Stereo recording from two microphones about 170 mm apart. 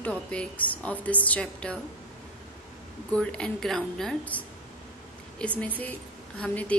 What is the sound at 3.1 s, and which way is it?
A woman's voice, 5° left (ahead or behind).